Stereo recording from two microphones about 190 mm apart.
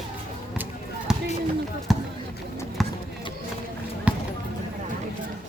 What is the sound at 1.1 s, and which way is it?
Run, 5° right (ahead or behind).